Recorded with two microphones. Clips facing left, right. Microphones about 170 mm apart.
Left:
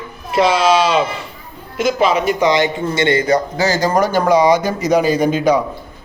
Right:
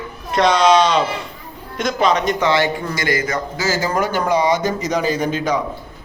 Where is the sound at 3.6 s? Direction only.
65° left (ahead or behind).